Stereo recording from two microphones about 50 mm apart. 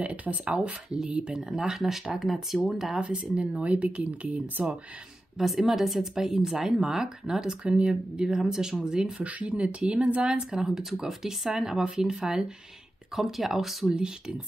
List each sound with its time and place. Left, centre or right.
0.0 s speech: right
0.8 s speech: centre
3.0 s speech: right
5.4 s speech: centre
9.2 s speech: right
10.5 s speech: centre
13.9 s speech: centre